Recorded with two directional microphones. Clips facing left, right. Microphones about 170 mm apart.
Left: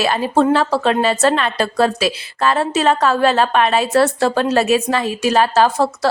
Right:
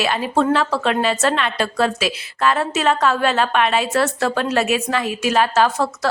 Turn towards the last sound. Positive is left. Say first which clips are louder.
# left 3 dB
turn(degrees=30)  # may be behind; listen again after turning